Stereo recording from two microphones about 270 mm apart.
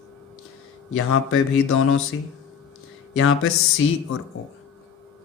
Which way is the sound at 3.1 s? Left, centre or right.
Left.